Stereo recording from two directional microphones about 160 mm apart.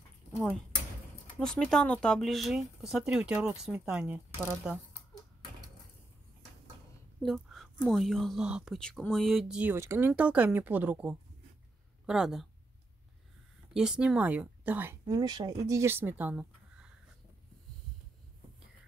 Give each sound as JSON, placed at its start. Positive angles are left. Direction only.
{"t": 0.3, "sound": "speech", "side_deg": 0}
{"t": 7.2, "sound": "a woman's voice", "side_deg": 0}
{"t": 13.7, "sound": "speech", "side_deg": -5}
{"t": 15.0, "sound": "speech", "side_deg": -25}